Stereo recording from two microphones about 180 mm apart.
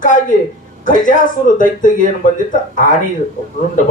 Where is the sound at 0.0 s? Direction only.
45° left (ahead or behind).